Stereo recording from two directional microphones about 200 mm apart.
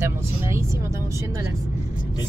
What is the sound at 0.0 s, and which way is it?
Vehicle, 15° right (ahead or behind).